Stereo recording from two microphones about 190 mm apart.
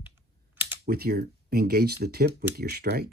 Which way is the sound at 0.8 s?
55° right (ahead or behind).